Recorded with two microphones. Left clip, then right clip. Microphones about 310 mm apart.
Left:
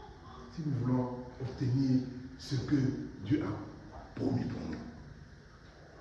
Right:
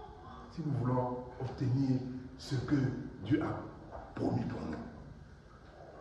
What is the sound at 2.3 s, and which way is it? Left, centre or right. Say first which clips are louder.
Speech: left 1 dB; centre.